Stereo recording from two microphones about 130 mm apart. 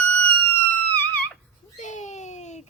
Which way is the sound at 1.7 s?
70° left (ahead or behind).